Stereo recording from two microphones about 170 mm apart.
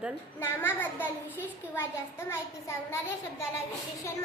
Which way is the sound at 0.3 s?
15° left (ahead or behind).